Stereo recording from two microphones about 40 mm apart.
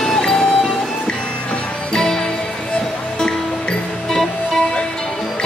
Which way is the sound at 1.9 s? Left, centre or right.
Centre.